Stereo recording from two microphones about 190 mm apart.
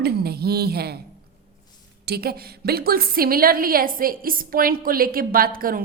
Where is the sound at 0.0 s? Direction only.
55° right (ahead or behind).